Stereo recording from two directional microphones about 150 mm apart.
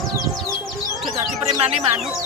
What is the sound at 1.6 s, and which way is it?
Speech, 40° right (ahead or behind).